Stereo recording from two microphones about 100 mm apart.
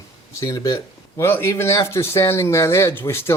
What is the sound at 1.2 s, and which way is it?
Speech, 25° left (ahead or behind).